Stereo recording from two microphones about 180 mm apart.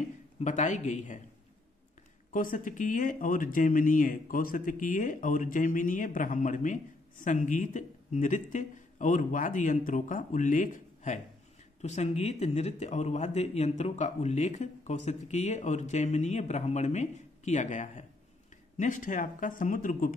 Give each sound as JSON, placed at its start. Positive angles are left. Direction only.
{"t": 0.4, "sound": "speech", "side_deg": 40}
{"t": 2.3, "sound": "speech", "side_deg": 50}